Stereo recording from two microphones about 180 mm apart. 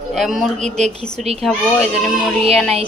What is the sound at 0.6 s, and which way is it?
Speech, 40° right (ahead or behind).